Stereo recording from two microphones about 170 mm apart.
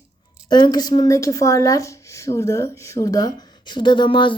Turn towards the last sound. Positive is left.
turn(degrees=30)  # may be behind; listen again after turning